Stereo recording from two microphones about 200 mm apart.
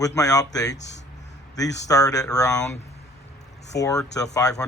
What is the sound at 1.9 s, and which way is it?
Speech, 15° left (ahead or behind).